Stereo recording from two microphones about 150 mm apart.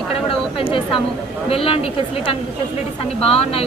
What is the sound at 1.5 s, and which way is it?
Speech, 40° left (ahead or behind).